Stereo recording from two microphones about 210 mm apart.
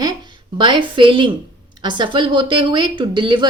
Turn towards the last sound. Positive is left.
turn(degrees=-20)  # may be behind; listen again after turning